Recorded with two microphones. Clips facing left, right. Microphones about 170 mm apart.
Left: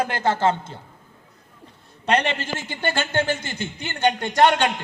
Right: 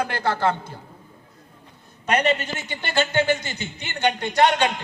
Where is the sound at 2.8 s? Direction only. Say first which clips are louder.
Right 1 dB; 50° left (ahead or behind).